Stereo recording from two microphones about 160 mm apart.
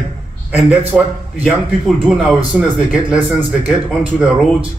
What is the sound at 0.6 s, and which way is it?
Speech, 5° right (ahead or behind).